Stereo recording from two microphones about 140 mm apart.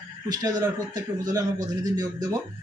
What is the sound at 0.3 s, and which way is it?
Speech, 25° right (ahead or behind).